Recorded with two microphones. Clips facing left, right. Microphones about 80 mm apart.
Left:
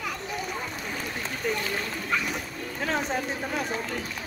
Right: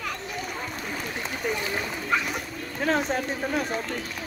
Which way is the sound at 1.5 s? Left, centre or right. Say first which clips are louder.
Even; centre.